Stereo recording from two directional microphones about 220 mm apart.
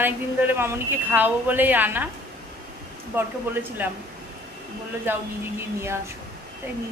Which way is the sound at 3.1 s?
10° right (ahead or behind).